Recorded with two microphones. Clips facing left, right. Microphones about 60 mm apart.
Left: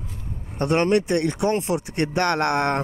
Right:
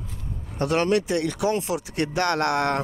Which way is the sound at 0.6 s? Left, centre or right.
Left.